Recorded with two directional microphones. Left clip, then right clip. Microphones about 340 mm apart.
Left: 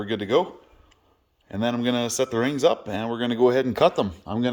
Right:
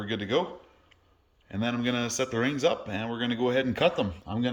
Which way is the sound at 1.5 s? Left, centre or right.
Centre.